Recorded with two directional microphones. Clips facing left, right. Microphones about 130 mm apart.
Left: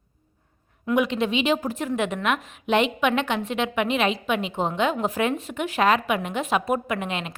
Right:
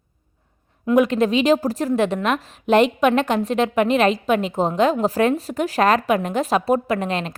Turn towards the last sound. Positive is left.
turn(degrees=-35)  # may be behind; listen again after turning